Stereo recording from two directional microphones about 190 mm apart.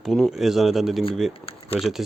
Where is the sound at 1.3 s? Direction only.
30° left (ahead or behind).